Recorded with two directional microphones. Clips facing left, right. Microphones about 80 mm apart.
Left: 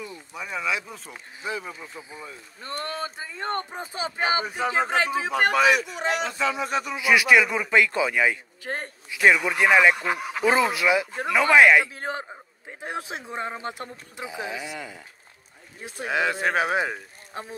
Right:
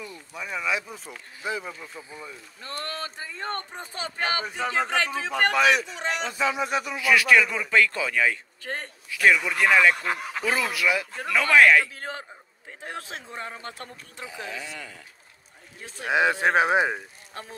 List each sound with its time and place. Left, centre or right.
0.3 s speech: centre
1.8 s a man's voice: centre
6.3 s speech: centre
7.0 s a man's voice: centre
10.4 s a man's voice: left
16.1 s speech: right
17.3 s speech: centre